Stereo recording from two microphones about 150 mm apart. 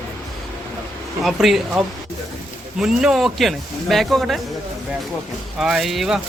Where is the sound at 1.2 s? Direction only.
Centre (ahead or behind).